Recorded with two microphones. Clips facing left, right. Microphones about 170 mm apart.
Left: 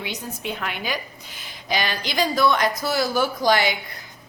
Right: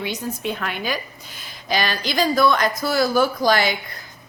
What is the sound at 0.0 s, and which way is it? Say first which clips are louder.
A woman's voice: right 5 dB; 15° left (ahead or behind).